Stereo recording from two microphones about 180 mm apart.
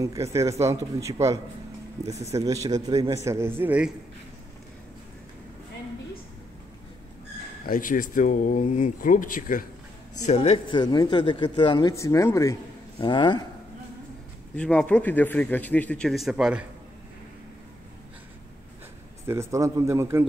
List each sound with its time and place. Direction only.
0.0 s a man's voice: 15° right (ahead or behind)
7.6 s speech: 50° left (ahead or behind)
10.2 s speech: 35° left (ahead or behind)
11.9 s a man's voice: 15° left (ahead or behind)
14.5 s a man's voice: 5° left (ahead or behind)
19.2 s speech: 15° right (ahead or behind)